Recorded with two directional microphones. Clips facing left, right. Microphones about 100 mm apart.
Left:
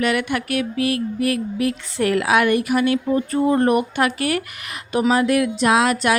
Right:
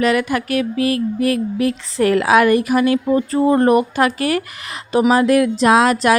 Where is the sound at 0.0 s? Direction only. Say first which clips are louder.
Right 4 dB; 35° right (ahead or behind).